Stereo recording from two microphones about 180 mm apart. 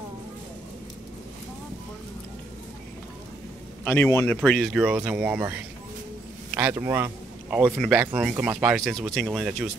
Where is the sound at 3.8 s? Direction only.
10° left (ahead or behind).